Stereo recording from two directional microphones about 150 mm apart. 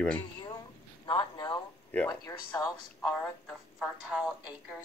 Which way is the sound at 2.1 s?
25° left (ahead or behind).